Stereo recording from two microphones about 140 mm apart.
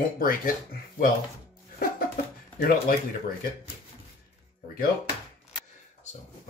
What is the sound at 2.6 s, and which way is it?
Speech, 90° left.